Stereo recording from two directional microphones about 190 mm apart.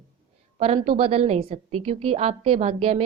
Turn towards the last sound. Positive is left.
turn(degrees=-30)  # may be behind; listen again after turning